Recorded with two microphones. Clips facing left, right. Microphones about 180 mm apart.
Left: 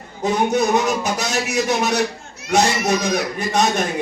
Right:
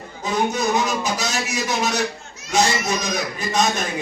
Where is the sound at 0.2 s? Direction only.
65° left (ahead or behind).